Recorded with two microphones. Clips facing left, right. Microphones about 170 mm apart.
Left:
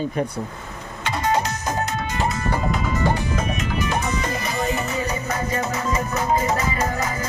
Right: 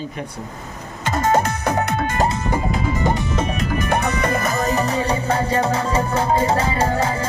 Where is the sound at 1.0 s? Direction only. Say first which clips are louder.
Right 4 dB; 45° right (ahead or behind).